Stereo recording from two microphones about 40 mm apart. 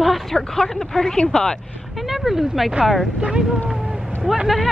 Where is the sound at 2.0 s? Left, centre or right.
Centre.